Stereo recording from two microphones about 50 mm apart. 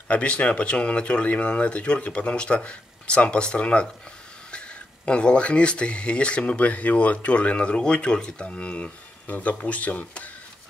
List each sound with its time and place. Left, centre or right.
0.1 s speech: left